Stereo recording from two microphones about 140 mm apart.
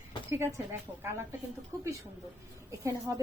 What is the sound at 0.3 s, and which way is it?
Speech, 20° right (ahead or behind).